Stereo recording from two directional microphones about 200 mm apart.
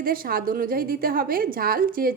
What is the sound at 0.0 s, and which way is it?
A woman's voice, 45° right (ahead or behind).